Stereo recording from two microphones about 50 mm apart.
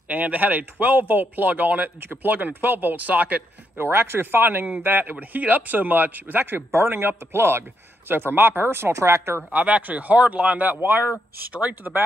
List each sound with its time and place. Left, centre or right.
0.1 s a man's voice: right
3.7 s a man's voice: right
9.5 s a man's voice: right
11.1 s a man's voice: right